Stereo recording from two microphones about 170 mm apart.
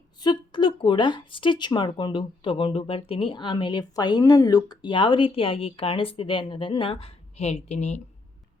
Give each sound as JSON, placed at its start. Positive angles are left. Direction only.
{"t": 0.2, "sound": "speech", "side_deg": 25}